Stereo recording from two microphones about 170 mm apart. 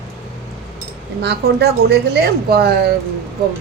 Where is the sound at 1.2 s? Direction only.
70° right (ahead or behind).